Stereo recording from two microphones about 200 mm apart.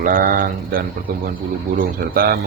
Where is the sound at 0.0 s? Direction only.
45° right (ahead or behind).